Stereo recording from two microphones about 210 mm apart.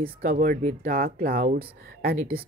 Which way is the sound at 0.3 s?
40° right (ahead or behind).